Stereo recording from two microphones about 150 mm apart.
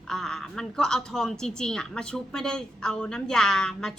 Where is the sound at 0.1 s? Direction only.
5° left (ahead or behind).